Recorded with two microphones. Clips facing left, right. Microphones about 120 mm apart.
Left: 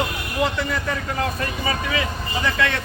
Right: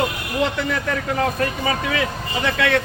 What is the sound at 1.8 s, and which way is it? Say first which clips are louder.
A man's voice: right 2 dB; 60° right (ahead or behind).